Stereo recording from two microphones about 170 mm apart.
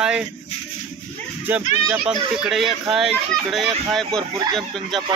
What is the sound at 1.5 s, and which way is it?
Speech, 10° right (ahead or behind).